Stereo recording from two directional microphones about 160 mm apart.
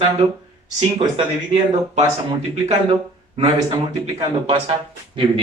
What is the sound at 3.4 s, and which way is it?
A man's voice, 25° right (ahead or behind).